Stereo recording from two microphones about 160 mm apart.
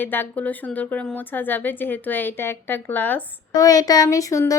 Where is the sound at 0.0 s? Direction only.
10° left (ahead or behind).